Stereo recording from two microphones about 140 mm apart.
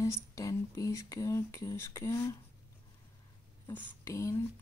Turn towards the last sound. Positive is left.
turn(degrees=20)  # may be behind; listen again after turning